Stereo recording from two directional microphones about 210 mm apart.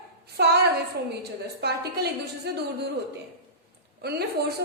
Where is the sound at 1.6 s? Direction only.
50° right (ahead or behind).